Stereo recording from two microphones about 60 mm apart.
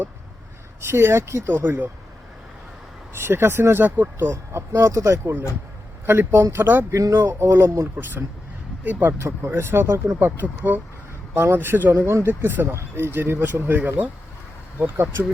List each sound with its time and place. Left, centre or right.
0.8 s speech: right
3.2 s speech: right
4.5 s speech: right
5.2 s speech: right
8.8 s speech: right
9.1 s speech: right
12.0 s speech: right